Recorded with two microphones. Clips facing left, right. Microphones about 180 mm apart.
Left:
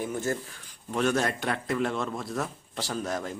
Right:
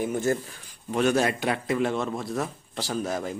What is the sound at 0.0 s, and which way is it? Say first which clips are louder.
Speech: right 5 dB; 15° right (ahead or behind).